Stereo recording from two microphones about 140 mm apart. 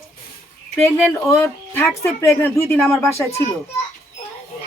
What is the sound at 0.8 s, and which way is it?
Speech, 15° left (ahead or behind).